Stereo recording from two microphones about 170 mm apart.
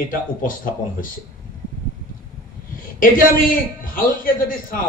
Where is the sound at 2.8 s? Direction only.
55° left (ahead or behind).